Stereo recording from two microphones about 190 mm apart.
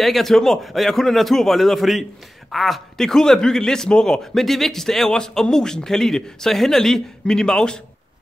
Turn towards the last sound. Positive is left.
turn(degrees=5)  # may be behind; listen again after turning